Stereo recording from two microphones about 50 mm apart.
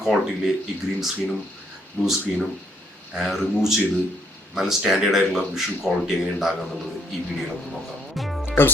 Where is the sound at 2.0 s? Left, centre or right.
Centre.